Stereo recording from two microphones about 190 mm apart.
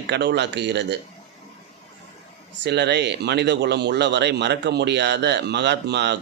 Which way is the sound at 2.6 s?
65° right (ahead or behind).